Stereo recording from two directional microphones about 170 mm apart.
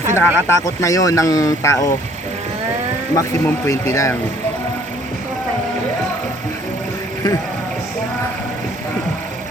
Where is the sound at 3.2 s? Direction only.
15° left (ahead or behind).